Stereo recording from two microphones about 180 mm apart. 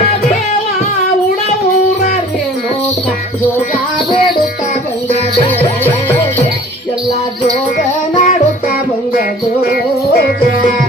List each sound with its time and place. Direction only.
8.1 s music: 45° left (ahead or behind)
10.1 s music: 55° left (ahead or behind)